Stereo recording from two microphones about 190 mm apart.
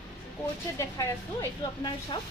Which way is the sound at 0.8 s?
15° left (ahead or behind).